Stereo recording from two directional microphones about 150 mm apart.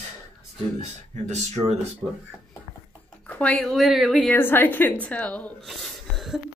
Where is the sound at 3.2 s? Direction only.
10° left (ahead or behind).